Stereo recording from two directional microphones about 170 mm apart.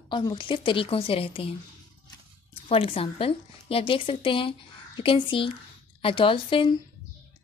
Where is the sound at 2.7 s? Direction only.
35° left (ahead or behind).